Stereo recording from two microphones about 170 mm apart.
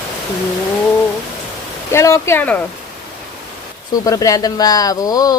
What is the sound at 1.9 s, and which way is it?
Speech, 15° left (ahead or behind).